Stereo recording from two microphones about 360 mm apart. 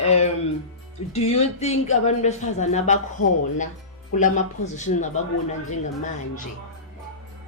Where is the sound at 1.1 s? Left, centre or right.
Centre.